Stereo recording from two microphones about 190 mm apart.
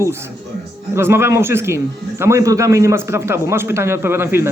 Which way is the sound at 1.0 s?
15° right (ahead or behind).